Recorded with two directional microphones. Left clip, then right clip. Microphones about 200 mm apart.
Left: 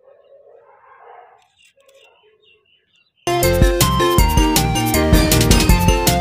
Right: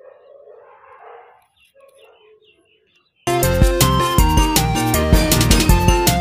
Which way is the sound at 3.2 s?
Centre (ahead or behind).